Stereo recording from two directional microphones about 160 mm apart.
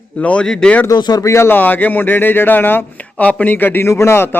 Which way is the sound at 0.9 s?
25° left (ahead or behind).